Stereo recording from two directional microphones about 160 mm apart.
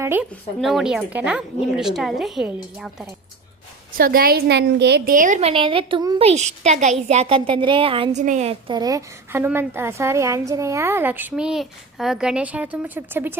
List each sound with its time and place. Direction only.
0.0 s speech: 15° right (ahead or behind)
0.6 s speech: centre (ahead or behind)
3.9 s a woman's voice: 65° right (ahead or behind); by 6.1 s 30° right (ahead or behind)
6.1 s a woman's voice: 40° right (ahead or behind)
8.2 s a woman's voice: 50° right (ahead or behind)
8.7 s a woman's voice: 25° right (ahead or behind)